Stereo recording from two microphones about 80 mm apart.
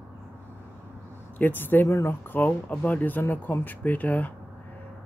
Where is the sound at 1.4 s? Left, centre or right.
Left.